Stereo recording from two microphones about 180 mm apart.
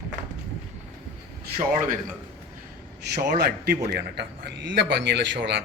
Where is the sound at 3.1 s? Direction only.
65° right (ahead or behind).